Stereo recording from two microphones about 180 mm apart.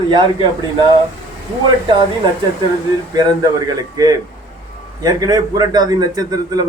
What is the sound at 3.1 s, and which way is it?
A man's voice, 20° right (ahead or behind).